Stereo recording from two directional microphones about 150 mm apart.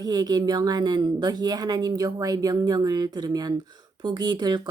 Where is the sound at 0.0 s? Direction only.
25° right (ahead or behind).